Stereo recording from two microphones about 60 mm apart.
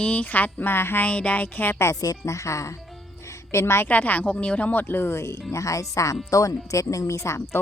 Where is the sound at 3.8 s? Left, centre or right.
Left.